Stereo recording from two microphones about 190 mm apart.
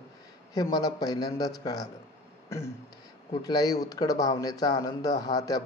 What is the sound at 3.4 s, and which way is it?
Speech, 20° left (ahead or behind).